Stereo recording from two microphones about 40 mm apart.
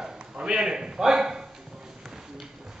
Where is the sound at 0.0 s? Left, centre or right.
Centre.